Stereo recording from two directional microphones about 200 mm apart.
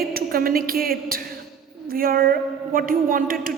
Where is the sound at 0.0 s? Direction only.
50° right (ahead or behind).